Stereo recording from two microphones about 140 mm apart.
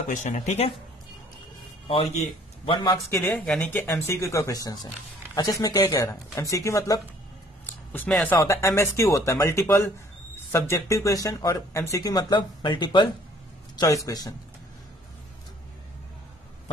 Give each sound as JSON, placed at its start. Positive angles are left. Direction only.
{"t": 0.1, "sound": "speech", "side_deg": 60}
{"t": 1.9, "sound": "a man's voice", "side_deg": 40}
{"t": 3.3, "sound": "speech", "side_deg": 5}
{"t": 7.6, "sound": "a sound", "side_deg": 15}
{"t": 8.2, "sound": "speech", "side_deg": 15}